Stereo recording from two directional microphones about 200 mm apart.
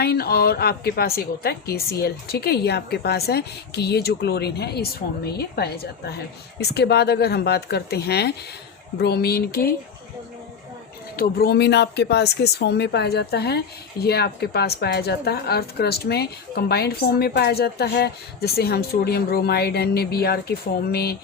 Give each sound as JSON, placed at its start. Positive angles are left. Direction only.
{"t": 0.0, "sound": "a woman's voice", "side_deg": 50}
{"t": 11.2, "sound": "a woman's voice", "side_deg": 50}